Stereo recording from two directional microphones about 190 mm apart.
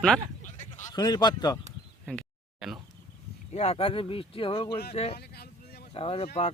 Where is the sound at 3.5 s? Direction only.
30° left (ahead or behind).